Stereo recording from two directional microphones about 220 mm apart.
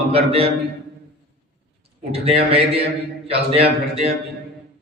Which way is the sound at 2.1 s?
25° right (ahead or behind).